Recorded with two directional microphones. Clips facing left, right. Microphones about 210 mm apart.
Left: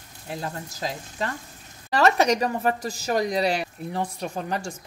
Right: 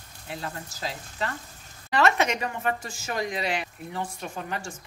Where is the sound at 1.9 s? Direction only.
35° left (ahead or behind).